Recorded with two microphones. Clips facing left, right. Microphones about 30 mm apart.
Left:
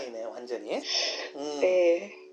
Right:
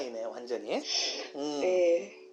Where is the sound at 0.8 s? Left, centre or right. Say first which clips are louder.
Left 3 dB; centre.